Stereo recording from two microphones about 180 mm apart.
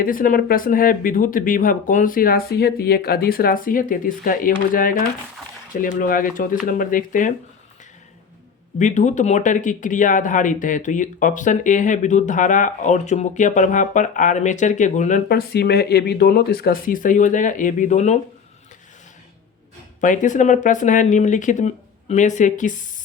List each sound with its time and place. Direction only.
0.0 s speech: 50° left (ahead or behind)
8.8 s speech: 40° left (ahead or behind)
20.0 s speech: 45° left (ahead or behind)